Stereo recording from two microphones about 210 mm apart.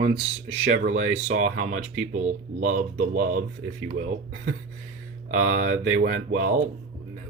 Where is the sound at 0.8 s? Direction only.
35° right (ahead or behind).